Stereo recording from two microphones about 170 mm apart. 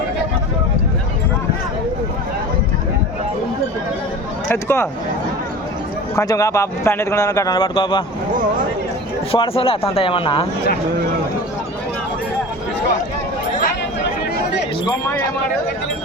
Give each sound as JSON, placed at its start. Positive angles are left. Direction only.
{"t": 4.4, "sound": "speech", "side_deg": 15}
{"t": 6.1, "sound": "speech", "side_deg": 20}
{"t": 9.3, "sound": "speech", "side_deg": 35}